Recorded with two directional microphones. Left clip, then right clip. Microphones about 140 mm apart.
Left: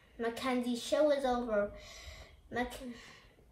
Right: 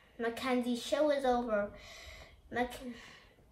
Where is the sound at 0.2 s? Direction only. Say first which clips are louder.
Right 1 dB; 20° left (ahead or behind).